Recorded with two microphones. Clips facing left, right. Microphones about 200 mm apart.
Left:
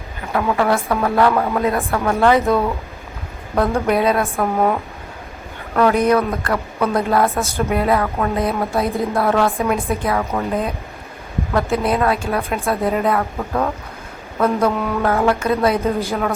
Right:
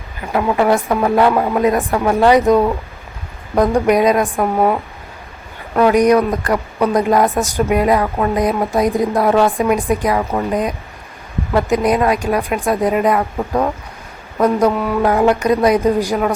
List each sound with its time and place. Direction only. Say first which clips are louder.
0.3 s a woman's voice: right 3 dB; 15° right (ahead or behind)